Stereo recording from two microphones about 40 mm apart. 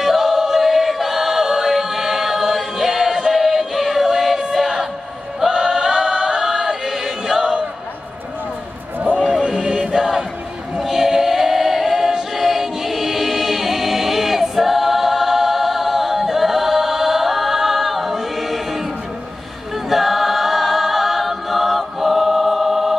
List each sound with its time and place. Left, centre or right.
0.0 s choir: centre
3.3 s music: centre
5.5 s choir: centre
9.4 s choir: centre
19.7 s a capella: centre